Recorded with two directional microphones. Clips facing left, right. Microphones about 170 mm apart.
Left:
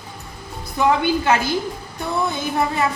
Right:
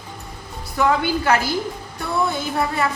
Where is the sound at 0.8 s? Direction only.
20° left (ahead or behind).